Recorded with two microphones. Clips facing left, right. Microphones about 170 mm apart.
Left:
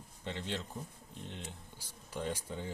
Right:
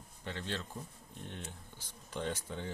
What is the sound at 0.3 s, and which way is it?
Speech, 15° left (ahead or behind).